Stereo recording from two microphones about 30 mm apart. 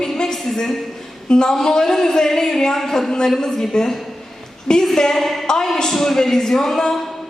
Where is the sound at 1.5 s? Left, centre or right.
Centre.